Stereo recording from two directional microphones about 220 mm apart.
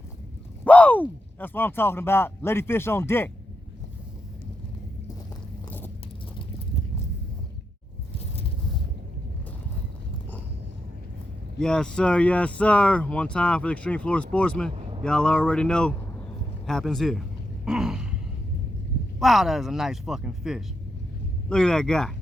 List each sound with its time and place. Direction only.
0.6 s speech: 5° left (ahead or behind)
11.6 s speech: 5° left (ahead or behind)
17.7 s a sound: 5° right (ahead or behind)
19.2 s speech: centre (ahead or behind)